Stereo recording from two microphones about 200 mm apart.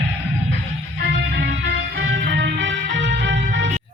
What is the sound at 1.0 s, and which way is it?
Music, 60° right (ahead or behind).